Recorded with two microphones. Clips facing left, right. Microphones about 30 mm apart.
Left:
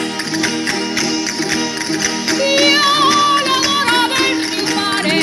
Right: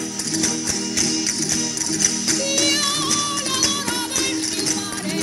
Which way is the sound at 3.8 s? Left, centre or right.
Left.